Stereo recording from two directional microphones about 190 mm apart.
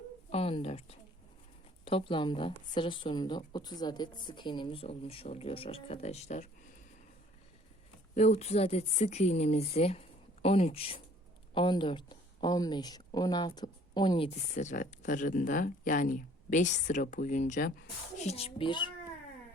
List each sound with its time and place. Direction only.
0.3 s a woman's voice: 30° left (ahead or behind)
8.1 s speech: 35° left (ahead or behind)
18.2 s speech: 35° left (ahead or behind)